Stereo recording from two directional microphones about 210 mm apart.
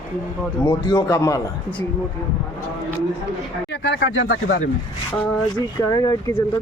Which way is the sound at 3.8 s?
60° left (ahead or behind).